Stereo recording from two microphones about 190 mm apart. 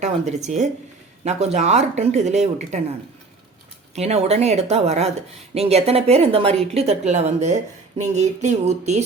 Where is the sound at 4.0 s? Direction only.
35° right (ahead or behind).